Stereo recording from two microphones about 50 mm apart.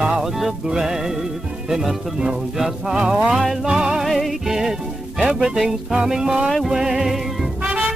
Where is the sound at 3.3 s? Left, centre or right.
Centre.